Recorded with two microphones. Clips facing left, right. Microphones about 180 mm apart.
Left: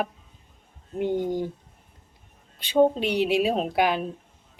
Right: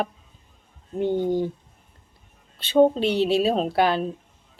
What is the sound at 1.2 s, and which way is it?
Speech, 20° right (ahead or behind).